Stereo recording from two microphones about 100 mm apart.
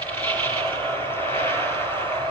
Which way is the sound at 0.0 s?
20° left (ahead or behind).